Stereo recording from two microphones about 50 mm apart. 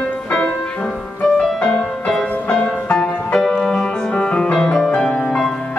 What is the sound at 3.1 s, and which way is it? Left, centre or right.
Music, left.